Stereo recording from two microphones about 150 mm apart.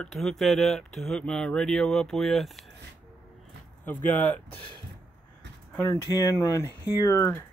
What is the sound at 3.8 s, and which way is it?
Speech, 10° left (ahead or behind).